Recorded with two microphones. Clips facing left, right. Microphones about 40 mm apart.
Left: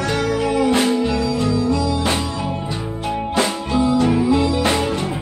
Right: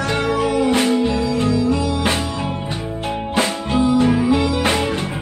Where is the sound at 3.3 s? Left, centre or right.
Right.